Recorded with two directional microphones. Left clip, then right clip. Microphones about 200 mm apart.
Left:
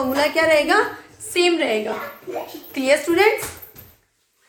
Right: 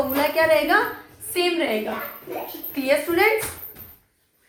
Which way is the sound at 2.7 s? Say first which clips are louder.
Left 3 dB; 45° left (ahead or behind).